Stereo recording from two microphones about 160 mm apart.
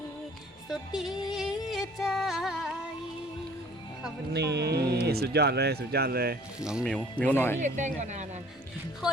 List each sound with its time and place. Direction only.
0.7 s music: centre (ahead or behind)
4.3 s speech: 90° right
6.7 s speech: 5° right (ahead or behind)
7.2 s speech: 10° left (ahead or behind)
7.6 s speech: 50° right (ahead or behind)